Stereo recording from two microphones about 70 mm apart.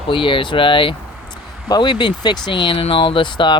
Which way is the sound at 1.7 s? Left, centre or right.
Left.